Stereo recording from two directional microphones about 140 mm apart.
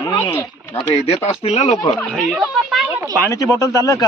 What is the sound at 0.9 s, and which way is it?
Speech, 45° left (ahead or behind).